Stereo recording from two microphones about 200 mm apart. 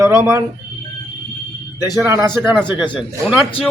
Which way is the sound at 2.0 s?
15° right (ahead or behind).